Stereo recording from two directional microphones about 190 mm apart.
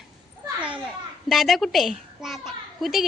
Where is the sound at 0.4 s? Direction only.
5° right (ahead or behind).